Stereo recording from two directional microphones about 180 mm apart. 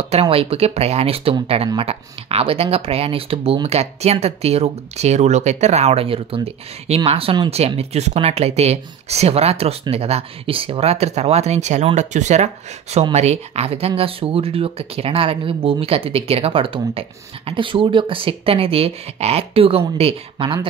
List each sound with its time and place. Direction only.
0.0 s speech: 35° right (ahead or behind)